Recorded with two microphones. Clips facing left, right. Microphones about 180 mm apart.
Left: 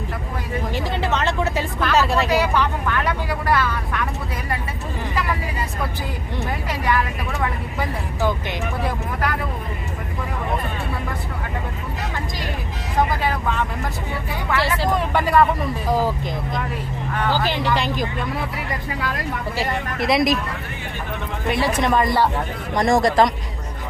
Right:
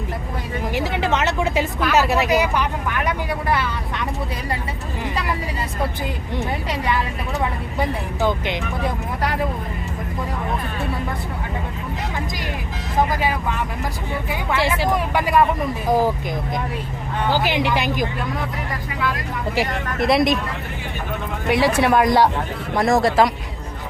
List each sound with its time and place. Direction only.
0.9 s a sound: 15° right (ahead or behind)
7.8 s a sound: 20° right (ahead or behind)
13.1 s vehicle: 10° right (ahead or behind)
14.5 s speech: 15° right (ahead or behind)
17.2 s speech: 15° right (ahead or behind)
20.0 s speech: centre (ahead or behind)
21.4 s speech: 15° right (ahead or behind)
22.7 s speech: 5° right (ahead or behind)